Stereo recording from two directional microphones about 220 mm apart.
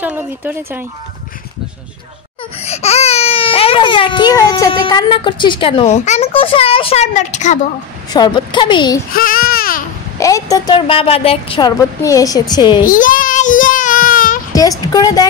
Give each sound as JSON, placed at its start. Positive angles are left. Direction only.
{"t": 0.0, "sound": "speech", "side_deg": -10}
{"t": 2.6, "sound": "speech", "side_deg": 30}
{"t": 8.1, "sound": "speech", "side_deg": 20}
{"t": 9.1, "sound": "speech", "side_deg": 40}
{"t": 10.1, "sound": "speech", "side_deg": 15}
{"t": 12.8, "sound": "child singing", "side_deg": 40}
{"t": 14.5, "sound": "speech", "side_deg": 15}